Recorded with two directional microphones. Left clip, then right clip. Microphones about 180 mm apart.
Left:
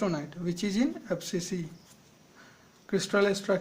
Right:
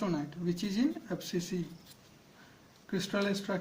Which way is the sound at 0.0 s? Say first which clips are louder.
Left 3 dB; 40° left (ahead or behind).